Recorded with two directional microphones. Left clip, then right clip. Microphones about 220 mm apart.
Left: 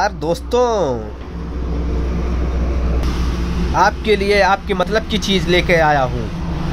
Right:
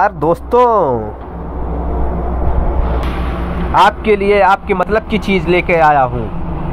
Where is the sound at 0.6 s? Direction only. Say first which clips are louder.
Right 5 dB; centre (ahead or behind).